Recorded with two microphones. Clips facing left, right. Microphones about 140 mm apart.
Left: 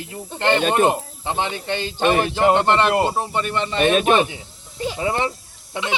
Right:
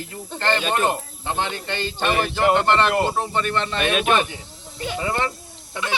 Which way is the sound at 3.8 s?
40° left (ahead or behind).